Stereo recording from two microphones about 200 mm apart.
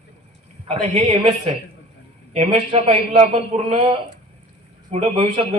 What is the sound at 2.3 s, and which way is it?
A man's voice, 30° right (ahead or behind).